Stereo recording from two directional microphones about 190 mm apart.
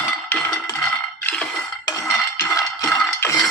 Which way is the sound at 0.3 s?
10° left (ahead or behind).